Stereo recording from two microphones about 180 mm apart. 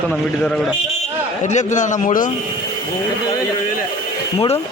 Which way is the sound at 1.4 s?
40° left (ahead or behind).